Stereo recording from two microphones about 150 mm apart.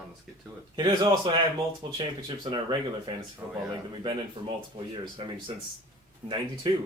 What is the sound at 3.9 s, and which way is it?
Speech, 35° right (ahead or behind).